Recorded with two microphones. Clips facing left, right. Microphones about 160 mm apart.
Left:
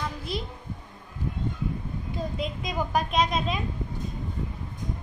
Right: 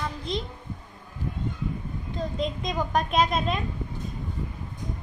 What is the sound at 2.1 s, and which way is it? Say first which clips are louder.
A woman's voice: right 3 dB; 5° left (ahead or behind).